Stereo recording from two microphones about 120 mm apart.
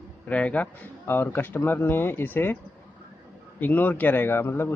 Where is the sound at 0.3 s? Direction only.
10° left (ahead or behind).